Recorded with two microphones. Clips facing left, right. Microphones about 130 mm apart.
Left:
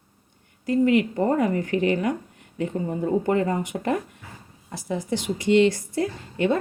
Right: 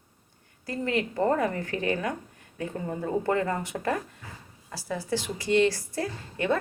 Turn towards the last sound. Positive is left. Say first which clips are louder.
# left 4 dB
turn(degrees=20)  # may be behind; listen again after turning